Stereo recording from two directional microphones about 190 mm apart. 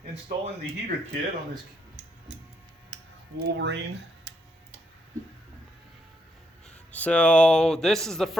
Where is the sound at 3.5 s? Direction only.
65° right (ahead or behind).